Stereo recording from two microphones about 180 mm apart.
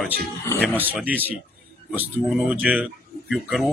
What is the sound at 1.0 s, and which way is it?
A man's voice, 10° right (ahead or behind).